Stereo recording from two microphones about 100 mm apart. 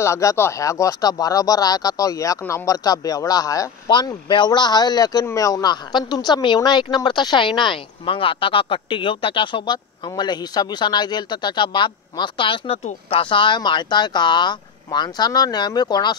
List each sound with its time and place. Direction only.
0.0 s speech: 30° left (ahead or behind)
3.9 s a woman's voice: 50° left (ahead or behind)